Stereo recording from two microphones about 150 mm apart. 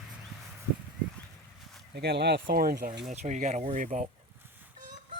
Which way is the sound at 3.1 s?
50° right (ahead or behind).